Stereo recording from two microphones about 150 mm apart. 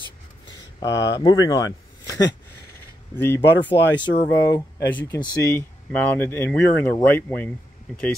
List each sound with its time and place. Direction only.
0.7 s speech: 25° left (ahead or behind)
3.2 s speech: 15° left (ahead or behind)
4.0 s speech: 25° left (ahead or behind); by 8.1 s 10° left (ahead or behind)